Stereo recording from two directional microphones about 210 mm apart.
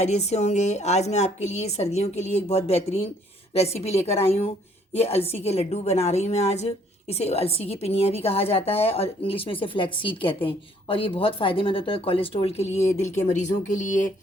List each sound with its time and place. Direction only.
0.0 s a woman's voice: 30° left (ahead or behind)